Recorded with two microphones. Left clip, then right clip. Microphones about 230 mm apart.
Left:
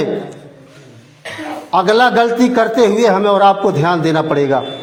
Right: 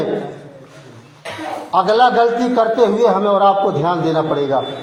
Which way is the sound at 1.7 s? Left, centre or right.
Left.